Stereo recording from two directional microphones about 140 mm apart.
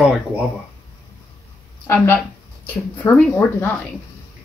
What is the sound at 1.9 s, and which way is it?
A woman's voice, 15° left (ahead or behind).